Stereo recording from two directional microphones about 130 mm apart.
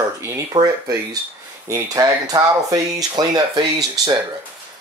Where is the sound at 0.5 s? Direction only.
30° right (ahead or behind).